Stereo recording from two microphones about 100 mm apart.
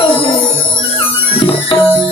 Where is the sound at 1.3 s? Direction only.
65° left (ahead or behind).